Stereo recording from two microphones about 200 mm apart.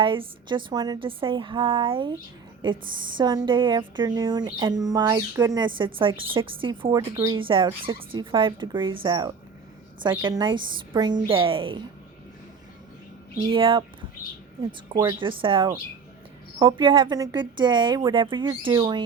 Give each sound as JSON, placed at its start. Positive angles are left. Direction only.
{"t": 0.0, "sound": "a woman's voice", "side_deg": -25}
{"t": 13.5, "sound": "a woman's voice", "side_deg": -25}
{"t": 14.9, "sound": "a woman's voice", "side_deg": -20}